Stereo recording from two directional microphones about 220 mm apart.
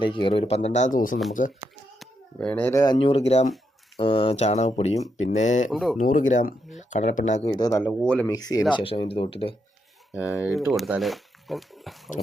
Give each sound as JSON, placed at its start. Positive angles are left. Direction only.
{"t": 0.0, "sound": "speech", "side_deg": 20}
{"t": 2.0, "sound": "speech", "side_deg": 5}
{"t": 5.7, "sound": "speech", "side_deg": 0}
{"t": 6.0, "sound": "speech", "side_deg": 35}
{"t": 7.7, "sound": "speech", "side_deg": 10}
{"t": 8.3, "sound": "speech", "side_deg": 15}
{"t": 10.4, "sound": "speech", "side_deg": 0}